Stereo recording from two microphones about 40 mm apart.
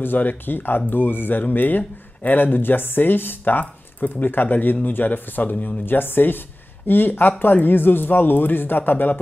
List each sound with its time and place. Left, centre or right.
0.0 s speech: left
5.9 s speech: left